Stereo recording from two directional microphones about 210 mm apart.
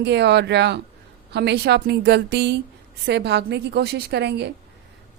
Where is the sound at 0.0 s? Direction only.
55° right (ahead or behind).